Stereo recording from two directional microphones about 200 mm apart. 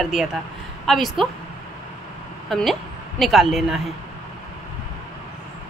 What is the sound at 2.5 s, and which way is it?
A woman's voice, centre (ahead or behind).